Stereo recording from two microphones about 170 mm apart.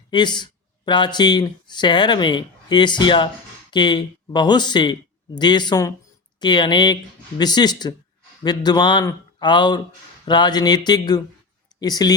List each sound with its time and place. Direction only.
0.1 s speech: 25° left (ahead or behind)